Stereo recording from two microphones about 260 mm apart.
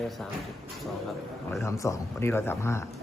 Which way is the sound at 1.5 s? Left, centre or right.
Centre.